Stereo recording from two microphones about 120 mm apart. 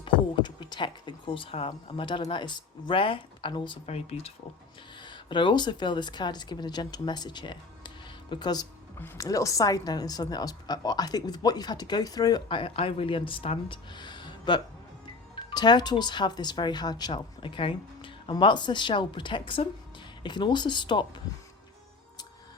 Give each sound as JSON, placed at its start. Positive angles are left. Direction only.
{"t": 0.0, "sound": "speech", "side_deg": 40}
{"t": 3.8, "sound": "speech", "side_deg": 60}
{"t": 5.0, "sound": "a woman's voice", "side_deg": 40}